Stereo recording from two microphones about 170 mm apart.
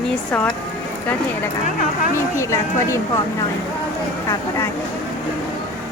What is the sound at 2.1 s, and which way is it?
Speech, 15° left (ahead or behind).